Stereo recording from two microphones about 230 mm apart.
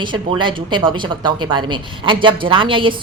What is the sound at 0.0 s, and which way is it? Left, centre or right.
A man's voice, centre.